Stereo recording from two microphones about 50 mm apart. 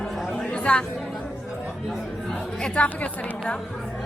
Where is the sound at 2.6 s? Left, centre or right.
Left.